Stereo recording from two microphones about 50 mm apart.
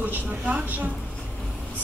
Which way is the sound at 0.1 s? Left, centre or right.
Right.